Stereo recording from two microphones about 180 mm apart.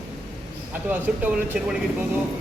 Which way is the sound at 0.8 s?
10° right (ahead or behind).